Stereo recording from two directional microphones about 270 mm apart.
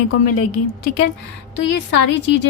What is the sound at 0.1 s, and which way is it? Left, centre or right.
Speech, left.